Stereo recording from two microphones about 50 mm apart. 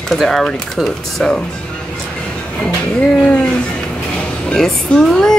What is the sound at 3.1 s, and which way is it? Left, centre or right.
Speech, left.